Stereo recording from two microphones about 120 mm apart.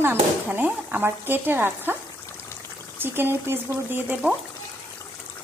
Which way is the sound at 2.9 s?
20° right (ahead or behind).